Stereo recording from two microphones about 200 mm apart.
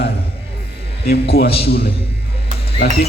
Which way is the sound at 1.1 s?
50° left (ahead or behind).